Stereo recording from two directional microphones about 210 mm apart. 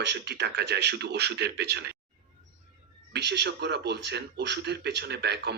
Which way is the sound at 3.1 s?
50° right (ahead or behind).